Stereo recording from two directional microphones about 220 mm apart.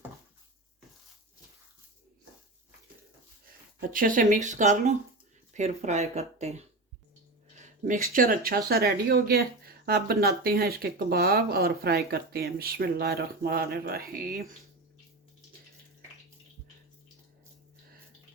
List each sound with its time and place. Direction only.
3.8 s speech: 40° right (ahead or behind)